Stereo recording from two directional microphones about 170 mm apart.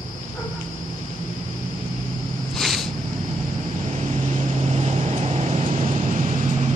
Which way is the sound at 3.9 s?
40° right (ahead or behind).